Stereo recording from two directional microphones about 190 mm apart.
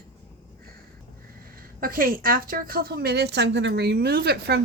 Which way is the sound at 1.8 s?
50° right (ahead or behind).